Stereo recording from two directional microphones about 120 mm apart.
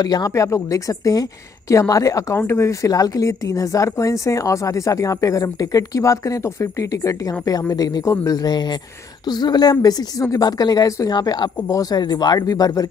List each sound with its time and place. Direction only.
0.0 s a woman's voice: 30° left (ahead or behind)